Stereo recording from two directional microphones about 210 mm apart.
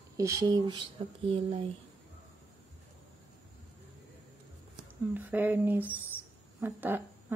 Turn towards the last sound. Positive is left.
turn(degrees=-10)  # may be behind; listen again after turning